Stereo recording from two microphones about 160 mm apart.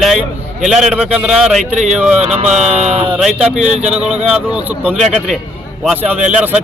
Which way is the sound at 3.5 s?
5° right (ahead or behind).